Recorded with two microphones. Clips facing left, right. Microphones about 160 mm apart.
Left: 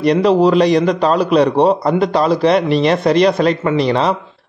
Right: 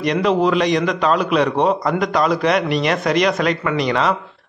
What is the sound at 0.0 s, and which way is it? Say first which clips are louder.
A man's voice: left 5 dB; 35° left (ahead or behind).